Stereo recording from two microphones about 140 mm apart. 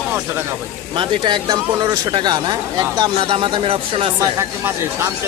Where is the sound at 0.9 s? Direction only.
35° right (ahead or behind).